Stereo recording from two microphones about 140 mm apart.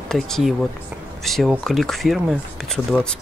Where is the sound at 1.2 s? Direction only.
Centre (ahead or behind).